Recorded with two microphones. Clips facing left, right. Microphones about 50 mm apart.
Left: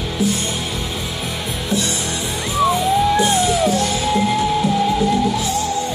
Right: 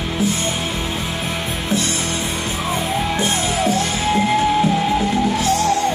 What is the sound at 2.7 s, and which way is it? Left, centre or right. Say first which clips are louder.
Music: left 4 dB; right.